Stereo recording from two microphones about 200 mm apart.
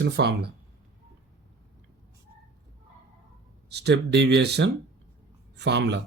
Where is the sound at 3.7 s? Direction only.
55° right (ahead or behind).